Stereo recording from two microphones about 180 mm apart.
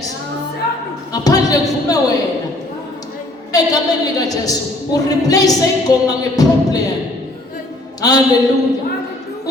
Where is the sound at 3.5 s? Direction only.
20° left (ahead or behind).